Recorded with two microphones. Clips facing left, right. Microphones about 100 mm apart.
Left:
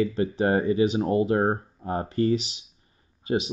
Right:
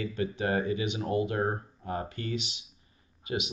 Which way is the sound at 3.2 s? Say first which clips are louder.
Left 8 dB; 35° left (ahead or behind).